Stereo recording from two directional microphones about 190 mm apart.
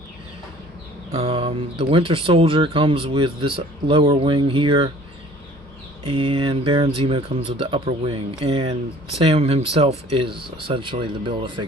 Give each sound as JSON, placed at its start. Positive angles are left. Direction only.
{"t": 1.1, "sound": "speech", "side_deg": -30}
{"t": 6.1, "sound": "speech", "side_deg": -30}